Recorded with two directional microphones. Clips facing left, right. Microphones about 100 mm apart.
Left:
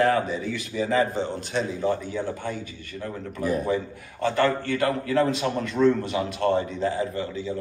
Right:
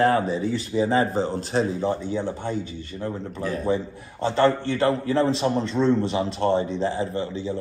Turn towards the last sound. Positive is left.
turn(degrees=-30)  # may be behind; listen again after turning